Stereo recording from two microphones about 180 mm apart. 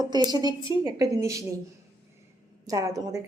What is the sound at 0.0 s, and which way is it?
A woman's voice, 20° right (ahead or behind).